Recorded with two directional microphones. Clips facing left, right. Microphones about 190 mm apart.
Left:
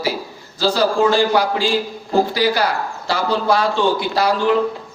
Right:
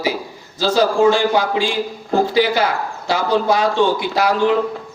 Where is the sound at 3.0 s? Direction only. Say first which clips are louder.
Right 2 dB; 20° right (ahead or behind).